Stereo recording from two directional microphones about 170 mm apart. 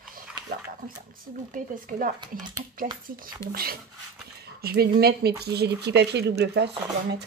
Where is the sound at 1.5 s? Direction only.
50° right (ahead or behind).